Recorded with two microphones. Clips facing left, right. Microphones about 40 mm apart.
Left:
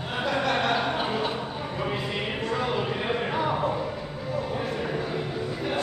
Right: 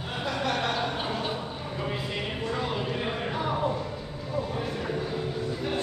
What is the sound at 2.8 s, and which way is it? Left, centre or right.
Music, centre.